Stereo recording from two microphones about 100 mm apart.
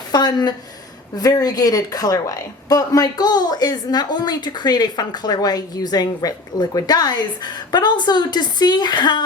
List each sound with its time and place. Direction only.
0.1 s a woman's voice: 40° left (ahead or behind)